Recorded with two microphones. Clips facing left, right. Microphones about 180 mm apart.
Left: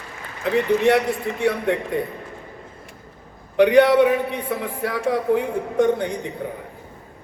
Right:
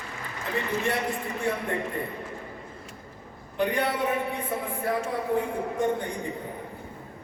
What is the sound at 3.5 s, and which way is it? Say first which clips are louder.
A man's voice: left 13 dB; 80° left.